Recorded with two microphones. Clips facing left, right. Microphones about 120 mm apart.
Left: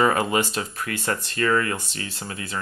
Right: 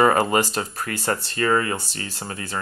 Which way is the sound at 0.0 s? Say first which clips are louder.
Right 3 dB; 40° right (ahead or behind).